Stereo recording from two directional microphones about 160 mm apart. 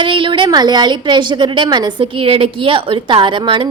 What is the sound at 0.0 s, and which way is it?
A woman's voice, 30° right (ahead or behind).